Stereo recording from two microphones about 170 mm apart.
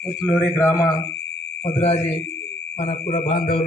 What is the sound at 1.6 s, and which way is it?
A man's voice, 40° left (ahead or behind).